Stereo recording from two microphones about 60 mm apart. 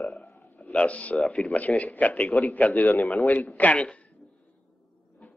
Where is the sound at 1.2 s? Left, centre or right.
Centre.